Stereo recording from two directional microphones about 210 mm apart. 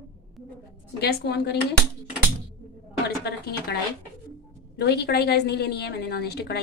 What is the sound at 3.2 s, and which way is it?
Speech, 50° left (ahead or behind).